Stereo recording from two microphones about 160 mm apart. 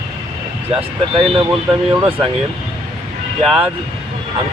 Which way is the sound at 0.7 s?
35° right (ahead or behind).